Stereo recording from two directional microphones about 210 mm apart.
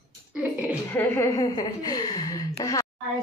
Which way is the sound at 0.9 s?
15° left (ahead or behind).